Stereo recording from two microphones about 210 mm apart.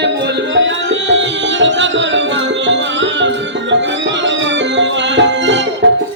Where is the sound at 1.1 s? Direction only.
60° right (ahead or behind).